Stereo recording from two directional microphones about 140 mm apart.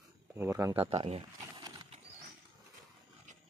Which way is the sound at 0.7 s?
45° right (ahead or behind).